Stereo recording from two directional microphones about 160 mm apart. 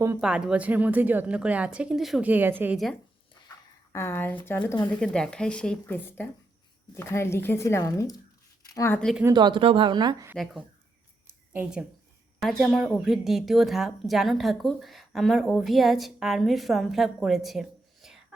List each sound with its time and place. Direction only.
0.2 s a woman's voice: 5° right (ahead or behind)
3.9 s a woman's voice: 15° left (ahead or behind)
9.3 s speech: 30° right (ahead or behind)
10.3 s a woman's voice: centre (ahead or behind)